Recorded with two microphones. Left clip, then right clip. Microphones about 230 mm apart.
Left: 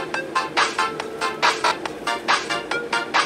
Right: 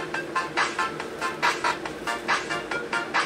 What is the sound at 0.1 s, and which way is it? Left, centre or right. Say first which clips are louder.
Music: left 5 dB; left.